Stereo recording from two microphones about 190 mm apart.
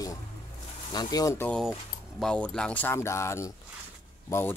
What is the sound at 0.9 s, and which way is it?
Speech, 20° left (ahead or behind).